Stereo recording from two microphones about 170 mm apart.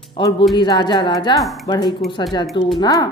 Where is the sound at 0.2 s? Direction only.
30° left (ahead or behind).